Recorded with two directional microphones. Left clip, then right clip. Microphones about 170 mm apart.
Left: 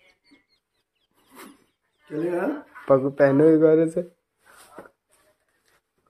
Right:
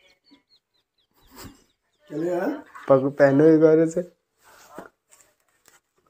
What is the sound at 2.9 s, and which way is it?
Speech, 5° right (ahead or behind).